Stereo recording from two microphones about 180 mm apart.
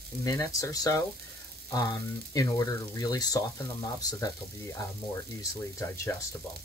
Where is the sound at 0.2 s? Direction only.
20° left (ahead or behind).